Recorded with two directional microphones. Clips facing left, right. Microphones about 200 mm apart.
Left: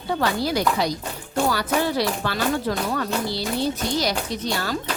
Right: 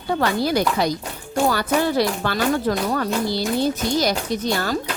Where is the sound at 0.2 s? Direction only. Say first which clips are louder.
Right 3 dB; 50° right (ahead or behind).